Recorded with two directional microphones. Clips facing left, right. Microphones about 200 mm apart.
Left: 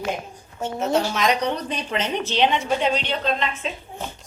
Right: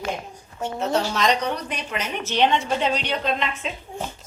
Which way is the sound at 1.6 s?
30° left (ahead or behind).